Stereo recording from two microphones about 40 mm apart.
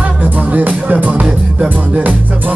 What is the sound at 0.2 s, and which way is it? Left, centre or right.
Music, right.